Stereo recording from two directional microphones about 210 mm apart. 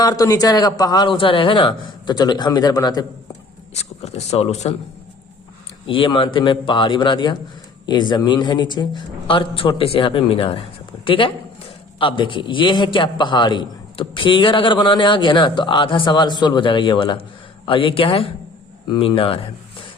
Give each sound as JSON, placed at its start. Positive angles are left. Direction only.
{"t": 0.0, "sound": "a man's voice", "side_deg": 15}
{"t": 3.8, "sound": "speech", "side_deg": 30}
{"t": 5.8, "sound": "a man's voice", "side_deg": 25}